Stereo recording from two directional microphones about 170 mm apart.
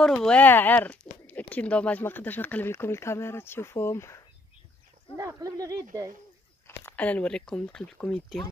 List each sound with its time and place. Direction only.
0.0 s speech: 5° left (ahead or behind)
5.1 s a sound: 20° right (ahead or behind)
6.8 s speech: 10° left (ahead or behind)